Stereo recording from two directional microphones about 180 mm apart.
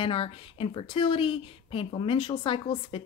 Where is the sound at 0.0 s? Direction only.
30° left (ahead or behind).